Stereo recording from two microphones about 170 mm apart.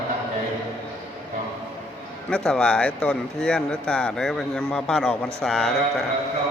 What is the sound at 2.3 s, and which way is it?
Speech, 5° left (ahead or behind).